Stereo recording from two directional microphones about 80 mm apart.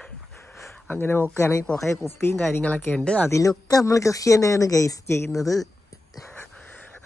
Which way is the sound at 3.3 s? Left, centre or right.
Left.